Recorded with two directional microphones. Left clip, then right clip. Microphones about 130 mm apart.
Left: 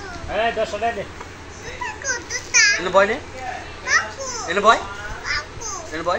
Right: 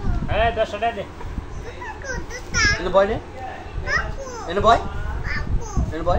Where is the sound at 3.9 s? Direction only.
30° right (ahead or behind).